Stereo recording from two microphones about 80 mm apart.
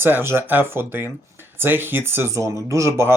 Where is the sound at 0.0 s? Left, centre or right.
Right.